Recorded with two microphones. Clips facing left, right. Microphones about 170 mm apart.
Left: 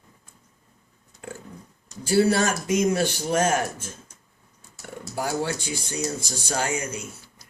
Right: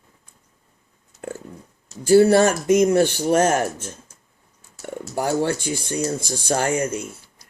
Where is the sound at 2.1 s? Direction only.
50° right (ahead or behind).